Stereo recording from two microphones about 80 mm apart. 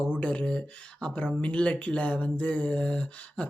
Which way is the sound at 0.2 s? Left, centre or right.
Centre.